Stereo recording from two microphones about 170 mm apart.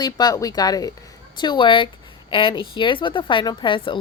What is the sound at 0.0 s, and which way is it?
A woman's voice, 25° left (ahead or behind).